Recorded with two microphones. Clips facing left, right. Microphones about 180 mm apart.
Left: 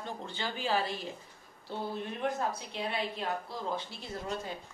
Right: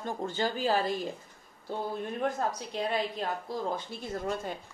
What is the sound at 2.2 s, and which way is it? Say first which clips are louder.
Speech: right 2 dB; 45° right (ahead or behind).